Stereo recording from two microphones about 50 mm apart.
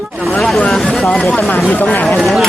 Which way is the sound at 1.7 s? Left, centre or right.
Left.